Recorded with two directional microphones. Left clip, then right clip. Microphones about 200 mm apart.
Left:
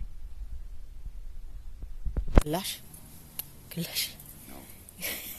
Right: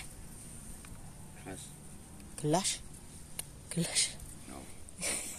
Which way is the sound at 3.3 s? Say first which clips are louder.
Right 1 dB; 20° right (ahead or behind).